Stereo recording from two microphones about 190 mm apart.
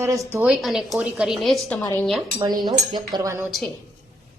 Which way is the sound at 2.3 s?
20° right (ahead or behind).